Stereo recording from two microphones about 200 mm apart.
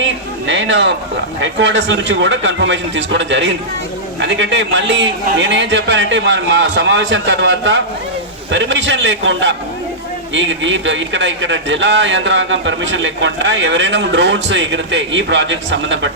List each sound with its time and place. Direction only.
0.0 s a man's voice: 65° right (ahead or behind)